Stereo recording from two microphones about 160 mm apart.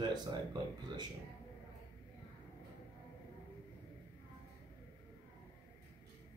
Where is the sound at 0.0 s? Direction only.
25° right (ahead or behind).